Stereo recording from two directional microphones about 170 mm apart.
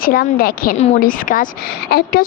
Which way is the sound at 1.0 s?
55° left (ahead or behind).